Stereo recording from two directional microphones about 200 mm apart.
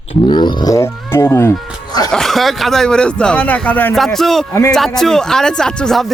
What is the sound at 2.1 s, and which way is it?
Speech, centre (ahead or behind).